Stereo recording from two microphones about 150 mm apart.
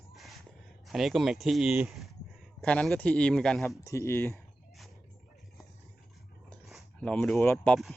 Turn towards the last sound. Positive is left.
turn(degrees=0)  # may be behind; listen again after turning